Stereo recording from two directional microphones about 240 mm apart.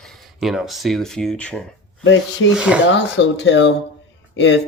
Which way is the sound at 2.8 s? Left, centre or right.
Left.